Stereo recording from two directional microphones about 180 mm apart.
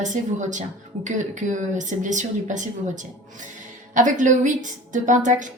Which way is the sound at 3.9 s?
45° right (ahead or behind).